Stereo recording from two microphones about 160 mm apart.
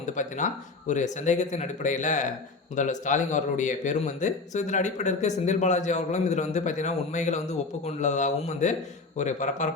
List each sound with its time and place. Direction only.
0.0 s a man's voice: 50° left (ahead or behind)